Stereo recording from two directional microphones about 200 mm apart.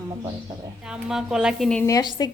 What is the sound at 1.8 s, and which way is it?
Speech, 20° left (ahead or behind).